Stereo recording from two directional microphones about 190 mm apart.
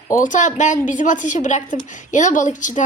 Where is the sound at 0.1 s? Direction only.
40° left (ahead or behind).